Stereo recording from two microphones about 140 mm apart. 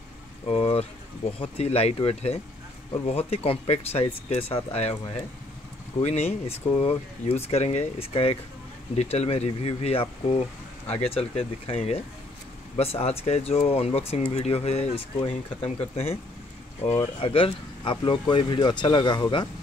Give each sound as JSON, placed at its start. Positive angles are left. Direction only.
{"t": 0.5, "sound": "a sound", "side_deg": 45}
{"t": 1.4, "sound": "speech", "side_deg": 45}
{"t": 17.2, "sound": "speech", "side_deg": 40}